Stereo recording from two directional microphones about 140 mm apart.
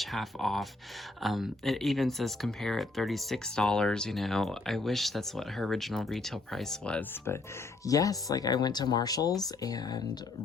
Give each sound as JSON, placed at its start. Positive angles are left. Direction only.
{"t": 0.0, "sound": "speech", "side_deg": 0}
{"t": 7.9, "sound": "speech", "side_deg": 25}